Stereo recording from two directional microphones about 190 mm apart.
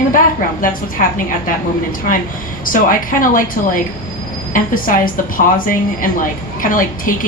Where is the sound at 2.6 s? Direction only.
45° left (ahead or behind).